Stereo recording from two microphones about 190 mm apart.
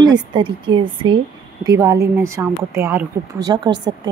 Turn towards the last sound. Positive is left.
turn(degrees=-20)  # may be behind; listen again after turning